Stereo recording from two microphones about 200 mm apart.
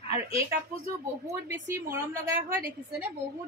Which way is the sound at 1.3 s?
15° right (ahead or behind).